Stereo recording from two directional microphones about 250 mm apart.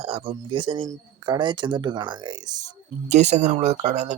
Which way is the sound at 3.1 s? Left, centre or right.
Right.